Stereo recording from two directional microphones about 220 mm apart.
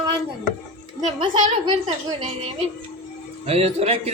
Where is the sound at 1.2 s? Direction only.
20° right (ahead or behind).